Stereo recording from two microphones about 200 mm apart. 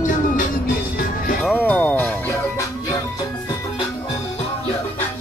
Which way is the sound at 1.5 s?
5° left (ahead or behind).